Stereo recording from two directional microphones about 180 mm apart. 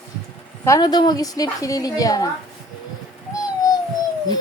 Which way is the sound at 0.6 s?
20° left (ahead or behind).